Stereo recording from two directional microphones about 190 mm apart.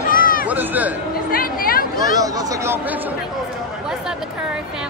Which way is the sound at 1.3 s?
50° left (ahead or behind).